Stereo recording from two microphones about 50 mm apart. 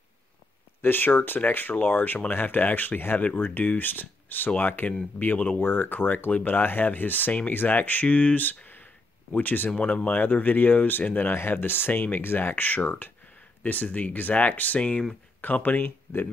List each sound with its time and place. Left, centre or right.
0.8 s speech: left
15.4 s speech: left